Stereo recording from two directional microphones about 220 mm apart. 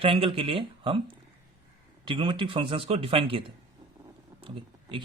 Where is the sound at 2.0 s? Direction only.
20° right (ahead or behind).